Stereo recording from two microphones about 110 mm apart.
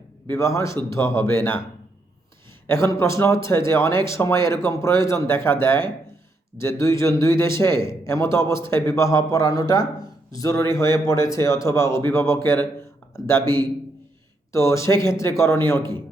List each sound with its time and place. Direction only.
0.3 s a man's voice: 25° left (ahead or behind)
2.6 s a man's voice: 25° left (ahead or behind)